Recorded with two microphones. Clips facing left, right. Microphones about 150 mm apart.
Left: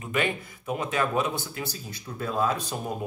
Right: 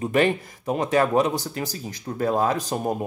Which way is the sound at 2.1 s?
50° right (ahead or behind).